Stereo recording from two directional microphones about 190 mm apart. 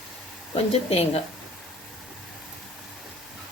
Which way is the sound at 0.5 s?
30° left (ahead or behind).